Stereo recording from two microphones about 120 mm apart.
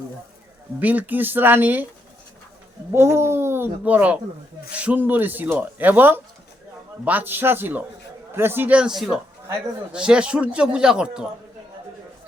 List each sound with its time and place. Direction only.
0.8 s a man's voice: 15° right (ahead or behind)
2.9 s a man's voice: 20° right (ahead or behind); by 11.3 s 5° right (ahead or behind)